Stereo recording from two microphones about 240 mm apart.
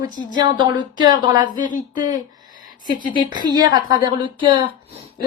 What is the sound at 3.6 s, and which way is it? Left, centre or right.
Speech, centre.